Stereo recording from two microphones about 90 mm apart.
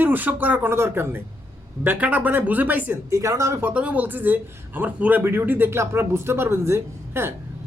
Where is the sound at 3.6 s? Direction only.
15° right (ahead or behind).